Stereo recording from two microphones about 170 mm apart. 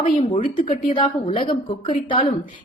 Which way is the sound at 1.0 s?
30° left (ahead or behind).